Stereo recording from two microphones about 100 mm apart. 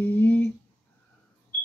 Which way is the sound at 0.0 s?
20° left (ahead or behind).